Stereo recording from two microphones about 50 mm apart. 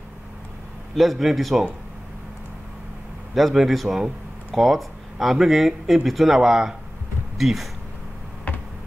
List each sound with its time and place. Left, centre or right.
0.9 s speech: centre
3.3 s speech: centre
8.5 s a sound: left